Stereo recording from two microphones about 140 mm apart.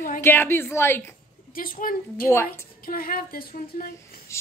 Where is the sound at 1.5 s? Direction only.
85° left.